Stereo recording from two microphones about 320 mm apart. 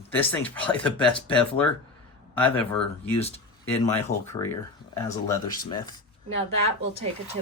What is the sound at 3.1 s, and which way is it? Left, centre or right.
Speech, centre.